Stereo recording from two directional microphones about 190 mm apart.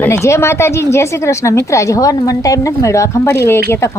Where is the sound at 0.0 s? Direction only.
15° left (ahead or behind).